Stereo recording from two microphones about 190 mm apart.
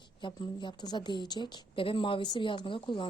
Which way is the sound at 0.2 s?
25° left (ahead or behind).